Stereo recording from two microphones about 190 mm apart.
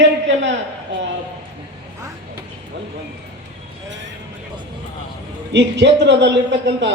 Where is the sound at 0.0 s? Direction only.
75° right (ahead or behind).